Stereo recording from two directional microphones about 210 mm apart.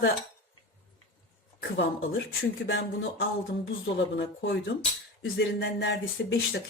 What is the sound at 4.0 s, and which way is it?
Speech, 55° left (ahead or behind).